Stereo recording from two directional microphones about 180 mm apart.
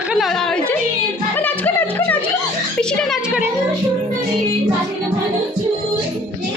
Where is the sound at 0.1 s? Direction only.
Centre (ahead or behind).